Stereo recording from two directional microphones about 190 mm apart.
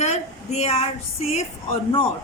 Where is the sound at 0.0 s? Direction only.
35° left (ahead or behind).